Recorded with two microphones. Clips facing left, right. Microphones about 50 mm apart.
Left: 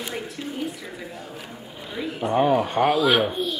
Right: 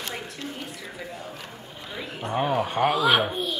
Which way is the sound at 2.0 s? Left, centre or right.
Centre.